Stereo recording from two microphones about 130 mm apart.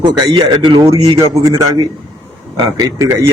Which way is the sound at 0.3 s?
35° right (ahead or behind).